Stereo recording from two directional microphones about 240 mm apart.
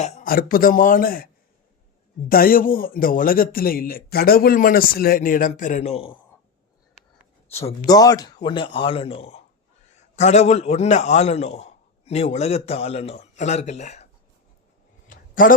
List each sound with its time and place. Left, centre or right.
0.0 s a man's voice: left
2.3 s a man's voice: left
7.6 s a man's voice: centre
15.1 s a sound: left